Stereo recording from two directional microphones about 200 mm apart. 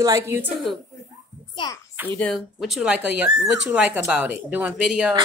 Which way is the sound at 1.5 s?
20° left (ahead or behind).